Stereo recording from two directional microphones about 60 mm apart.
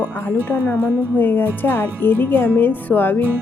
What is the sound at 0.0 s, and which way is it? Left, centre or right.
Speech, left.